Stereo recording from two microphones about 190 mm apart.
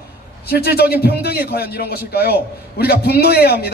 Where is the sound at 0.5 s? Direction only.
55° left (ahead or behind).